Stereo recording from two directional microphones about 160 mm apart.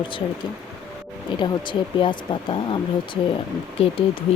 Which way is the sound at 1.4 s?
30° left (ahead or behind).